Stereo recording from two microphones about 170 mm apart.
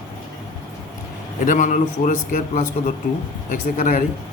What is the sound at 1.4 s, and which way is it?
Speech, 50° left (ahead or behind).